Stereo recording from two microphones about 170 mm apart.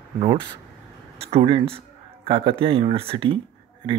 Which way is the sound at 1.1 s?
35° right (ahead or behind).